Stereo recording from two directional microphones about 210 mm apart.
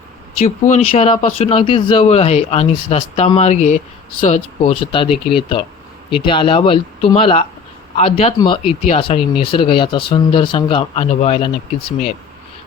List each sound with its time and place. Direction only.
0.3 s speech: 35° left (ahead or behind)